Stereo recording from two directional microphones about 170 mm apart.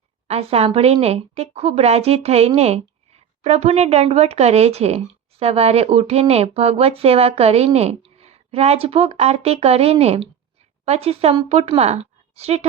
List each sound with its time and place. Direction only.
0.3 s speech: 35° right (ahead or behind)